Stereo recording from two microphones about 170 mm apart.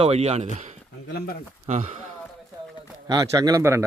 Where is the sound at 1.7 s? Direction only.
50° right (ahead or behind).